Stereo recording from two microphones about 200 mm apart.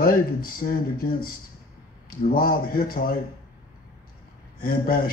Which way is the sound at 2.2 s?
45° left (ahead or behind).